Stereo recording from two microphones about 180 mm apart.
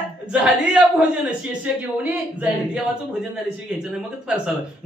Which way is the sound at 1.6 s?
10° right (ahead or behind).